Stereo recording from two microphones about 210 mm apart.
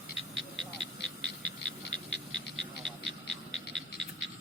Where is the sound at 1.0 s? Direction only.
55° left (ahead or behind).